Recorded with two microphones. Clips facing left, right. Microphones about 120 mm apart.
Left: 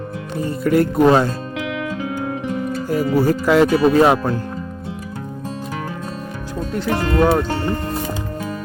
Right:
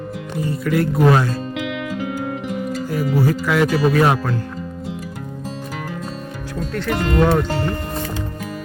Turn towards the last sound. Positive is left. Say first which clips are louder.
# left 1 dB
turn(degrees=10)  # may be behind; listen again after turning